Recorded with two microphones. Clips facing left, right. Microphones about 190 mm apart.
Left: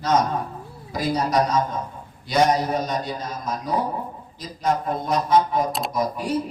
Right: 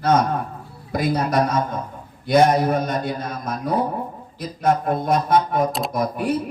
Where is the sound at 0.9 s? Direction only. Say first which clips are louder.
Right 2 dB; 55° right (ahead or behind).